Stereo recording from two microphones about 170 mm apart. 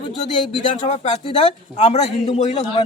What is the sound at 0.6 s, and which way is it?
Speech, 40° left (ahead or behind).